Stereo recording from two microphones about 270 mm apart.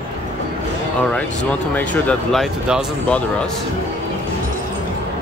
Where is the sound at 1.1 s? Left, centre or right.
Centre.